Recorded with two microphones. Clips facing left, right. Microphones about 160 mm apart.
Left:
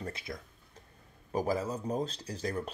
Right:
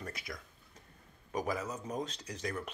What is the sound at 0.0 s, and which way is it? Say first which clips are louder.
Speech: left 4 dB; 25° left (ahead or behind).